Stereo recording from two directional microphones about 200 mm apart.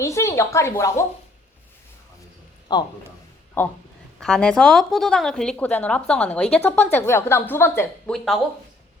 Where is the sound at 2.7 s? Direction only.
20° left (ahead or behind).